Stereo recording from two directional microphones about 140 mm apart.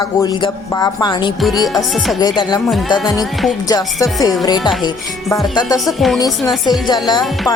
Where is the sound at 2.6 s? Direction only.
Centre (ahead or behind).